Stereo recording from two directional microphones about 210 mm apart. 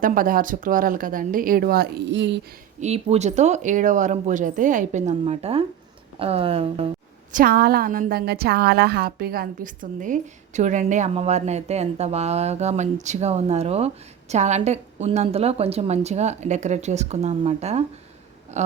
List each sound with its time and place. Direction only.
0.0 s a woman's voice: 40° right (ahead or behind); by 2.4 s 55° right (ahead or behind)
2.8 s a woman's voice: 30° right (ahead or behind)
7.3 s a woman's voice: 45° right (ahead or behind)
18.5 s a sound: 35° right (ahead or behind)